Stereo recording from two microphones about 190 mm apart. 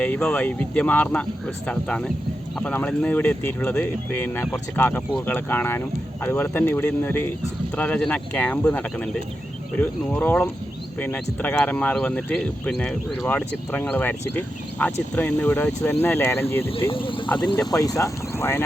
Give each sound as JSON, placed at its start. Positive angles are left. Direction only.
{"t": 0.0, "sound": "speech", "side_deg": 5}
{"t": 16.9, "sound": "speech", "side_deg": 25}